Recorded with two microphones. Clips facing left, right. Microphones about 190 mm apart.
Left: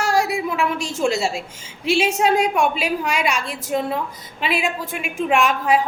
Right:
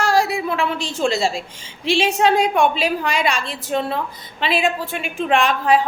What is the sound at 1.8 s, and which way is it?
Speech, 10° left (ahead or behind).